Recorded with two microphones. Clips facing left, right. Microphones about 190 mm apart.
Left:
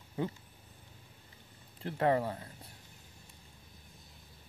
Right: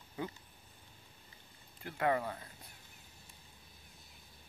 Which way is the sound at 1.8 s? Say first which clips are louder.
Left 4 dB; 30° left (ahead or behind).